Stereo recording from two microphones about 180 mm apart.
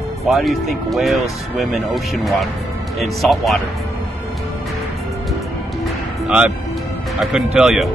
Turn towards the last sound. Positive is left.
turn(degrees=0)  # may be behind; listen again after turning